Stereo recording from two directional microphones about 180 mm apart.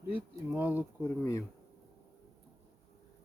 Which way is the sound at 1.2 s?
15° left (ahead or behind).